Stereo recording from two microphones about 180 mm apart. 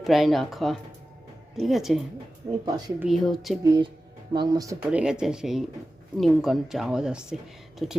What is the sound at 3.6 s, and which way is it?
Speech, 25° right (ahead or behind).